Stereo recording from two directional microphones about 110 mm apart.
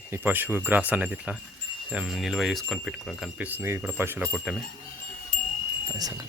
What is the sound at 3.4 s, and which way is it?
Speech, 15° right (ahead or behind).